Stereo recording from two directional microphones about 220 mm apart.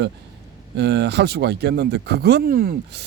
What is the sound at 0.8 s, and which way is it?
Speech, 50° right (ahead or behind).